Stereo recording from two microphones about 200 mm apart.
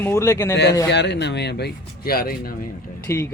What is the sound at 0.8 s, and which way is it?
Speech, 60° left (ahead or behind).